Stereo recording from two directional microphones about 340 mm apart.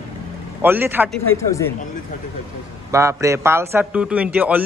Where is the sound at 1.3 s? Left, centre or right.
Centre.